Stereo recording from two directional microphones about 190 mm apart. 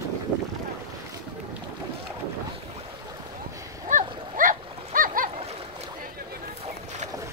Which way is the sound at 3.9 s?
45° right (ahead or behind).